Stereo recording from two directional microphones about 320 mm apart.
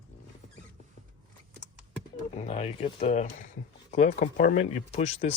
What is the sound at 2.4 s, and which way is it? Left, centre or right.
Speech, centre.